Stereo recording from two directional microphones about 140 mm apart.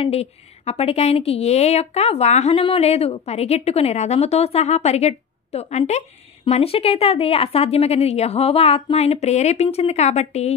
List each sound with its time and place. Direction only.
0.0 s a woman's voice: 45° left (ahead or behind)